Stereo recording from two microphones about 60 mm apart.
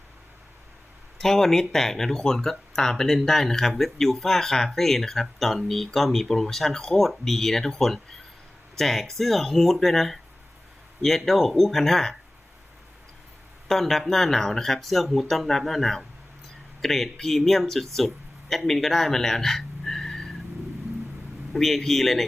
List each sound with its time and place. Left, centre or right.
1.2 s speech: centre
13.7 s speech: centre
21.5 s speech: centre